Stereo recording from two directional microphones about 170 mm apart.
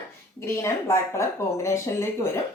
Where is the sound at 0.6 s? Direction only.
15° left (ahead or behind).